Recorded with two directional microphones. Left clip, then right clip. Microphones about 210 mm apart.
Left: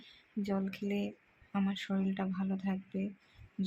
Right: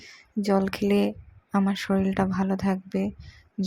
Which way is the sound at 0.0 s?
35° right (ahead or behind).